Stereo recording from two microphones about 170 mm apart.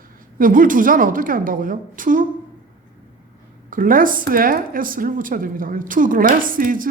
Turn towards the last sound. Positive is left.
turn(degrees=-55)  # may be behind; listen again after turning